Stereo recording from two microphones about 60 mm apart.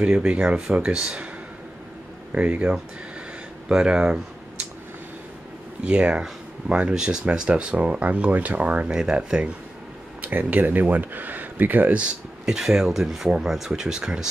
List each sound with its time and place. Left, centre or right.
0.0 s speech: centre
2.3 s speech: right
5.9 s speech: centre
8.9 s speech: centre
10.2 s speech: right
12.4 s speech: centre